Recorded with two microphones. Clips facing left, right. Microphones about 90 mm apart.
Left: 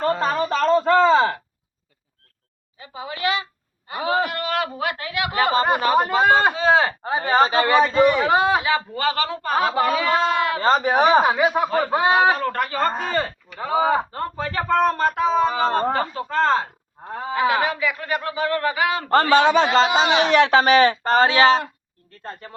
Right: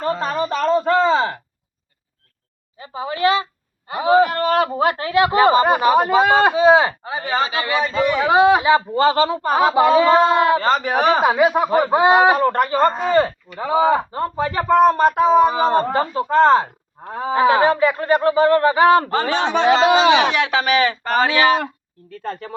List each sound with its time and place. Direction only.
0.1 s speech: centre (ahead or behind)
0.5 s a sound: 10° right (ahead or behind)
2.7 s a sound: 30° right (ahead or behind)
4.3 s speech: 40° right (ahead or behind)
5.6 s speech: 15° right (ahead or behind)
7.0 s speech: 40° left (ahead or behind)
8.2 s speech: 10° right (ahead or behind)
8.6 s speech: 25° right (ahead or behind)
10.6 s a man's voice: 30° left (ahead or behind)
11.2 s speech: 10° right (ahead or behind)
17.3 s speech: 30° right (ahead or behind)
20.3 s speech: 40° left (ahead or behind)
22.1 s speech: 90° right